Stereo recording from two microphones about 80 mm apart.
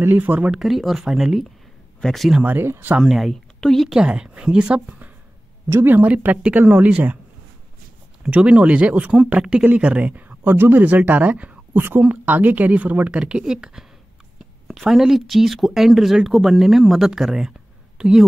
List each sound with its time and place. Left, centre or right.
0.0 s speech: right
0.5 s speech: centre
2.4 s speech: right
3.0 s speech: centre
4.0 s speech: centre
5.7 s speech: right
8.2 s speech: centre